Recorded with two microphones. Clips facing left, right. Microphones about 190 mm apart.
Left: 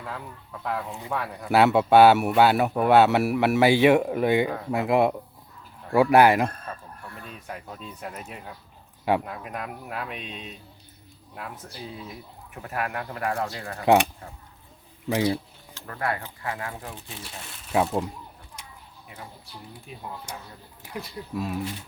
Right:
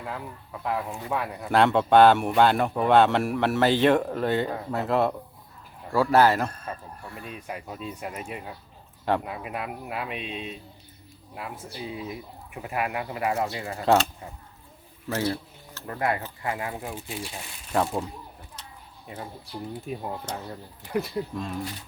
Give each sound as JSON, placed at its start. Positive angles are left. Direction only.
{"t": 0.0, "sound": "speech", "side_deg": -5}
{"t": 1.5, "sound": "speech", "side_deg": 5}
{"t": 7.3, "sound": "speech", "side_deg": -10}
{"t": 13.8, "sound": "speech", "side_deg": 15}
{"t": 15.0, "sound": "a sound", "side_deg": 15}
{"t": 15.9, "sound": "speech", "side_deg": -20}
{"t": 17.7, "sound": "speech", "side_deg": 5}
{"t": 19.9, "sound": "speech", "side_deg": -45}
{"t": 20.8, "sound": "speech", "side_deg": 10}